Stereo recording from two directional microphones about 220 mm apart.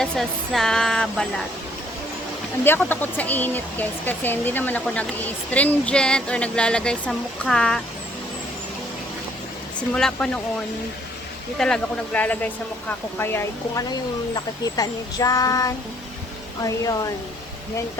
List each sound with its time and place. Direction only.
0.0 s speech: centre (ahead or behind)
2.6 s speech: 10° left (ahead or behind)
9.9 s speech: 5° left (ahead or behind)
11.5 s speech: 5° left (ahead or behind)